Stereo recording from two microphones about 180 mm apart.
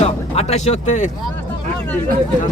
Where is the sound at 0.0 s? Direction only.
35° left (ahead or behind).